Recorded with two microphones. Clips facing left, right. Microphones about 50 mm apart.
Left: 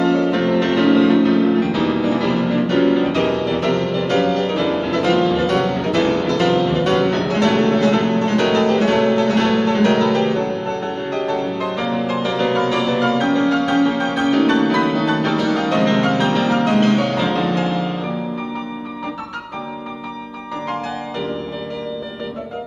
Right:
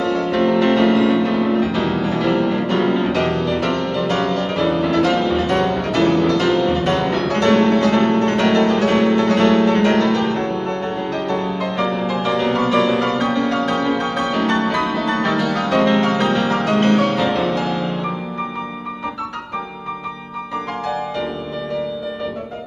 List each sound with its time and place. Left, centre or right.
0.0 s music: centre
11.2 s music: centre
12.6 s music: centre
13.0 s music: centre